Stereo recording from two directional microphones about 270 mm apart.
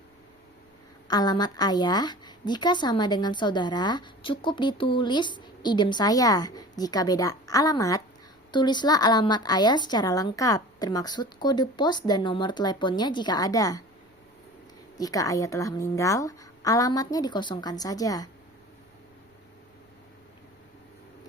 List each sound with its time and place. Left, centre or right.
1.0 s a woman's voice: centre
14.9 s a woman's voice: centre